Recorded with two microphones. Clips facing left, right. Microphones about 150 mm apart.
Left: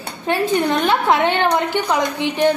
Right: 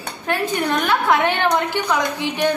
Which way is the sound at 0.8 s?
25° left (ahead or behind).